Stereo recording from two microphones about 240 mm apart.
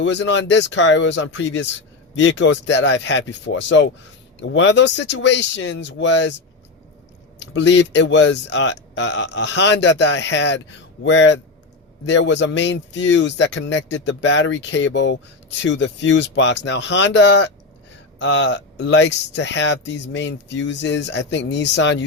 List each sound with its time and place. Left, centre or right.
0.0 s speech: left
7.3 s speech: left